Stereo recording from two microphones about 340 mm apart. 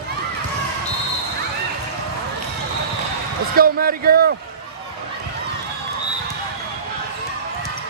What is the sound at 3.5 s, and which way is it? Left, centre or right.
Speech, right.